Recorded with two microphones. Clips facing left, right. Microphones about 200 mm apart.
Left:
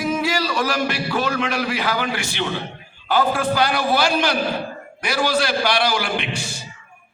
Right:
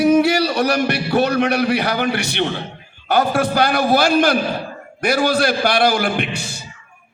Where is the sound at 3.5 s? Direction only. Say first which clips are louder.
Right 6 dB; 45° right (ahead or behind).